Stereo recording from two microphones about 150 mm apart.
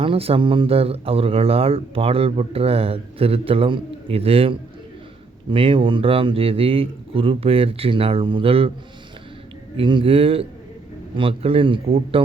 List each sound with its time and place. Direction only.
0.0 s speech: 40° right (ahead or behind)
9.7 s speech: 35° right (ahead or behind)